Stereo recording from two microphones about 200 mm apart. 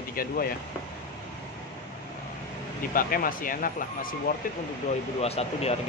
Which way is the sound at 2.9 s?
45° left (ahead or behind).